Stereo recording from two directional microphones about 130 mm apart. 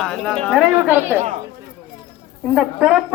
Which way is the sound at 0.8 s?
15° right (ahead or behind).